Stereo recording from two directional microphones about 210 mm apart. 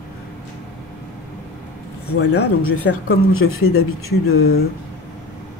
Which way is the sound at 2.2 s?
90° left.